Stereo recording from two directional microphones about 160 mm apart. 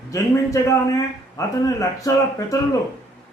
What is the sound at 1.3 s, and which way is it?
A man's voice, 20° left (ahead or behind).